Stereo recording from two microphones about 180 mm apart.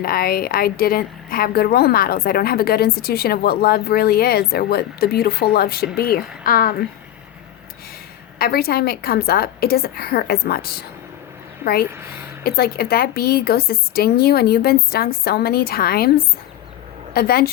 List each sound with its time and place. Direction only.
0.0 s a woman's voice: 55° left (ahead or behind)
8.4 s a woman's voice: 60° left (ahead or behind)